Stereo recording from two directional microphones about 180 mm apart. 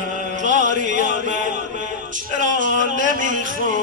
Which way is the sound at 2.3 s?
45° right (ahead or behind).